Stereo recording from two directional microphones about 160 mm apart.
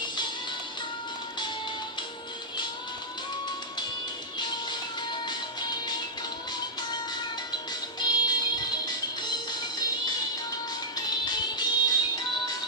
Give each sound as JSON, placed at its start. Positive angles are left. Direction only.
{"t": 4.4, "sound": "music", "side_deg": 30}
{"t": 8.0, "sound": "music", "side_deg": 25}